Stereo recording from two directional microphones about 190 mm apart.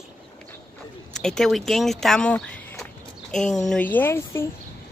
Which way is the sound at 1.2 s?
Centre (ahead or behind).